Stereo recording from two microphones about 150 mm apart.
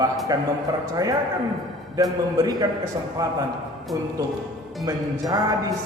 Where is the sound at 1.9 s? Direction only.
25° right (ahead or behind).